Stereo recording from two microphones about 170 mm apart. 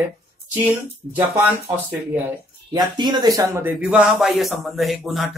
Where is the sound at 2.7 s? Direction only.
25° right (ahead or behind).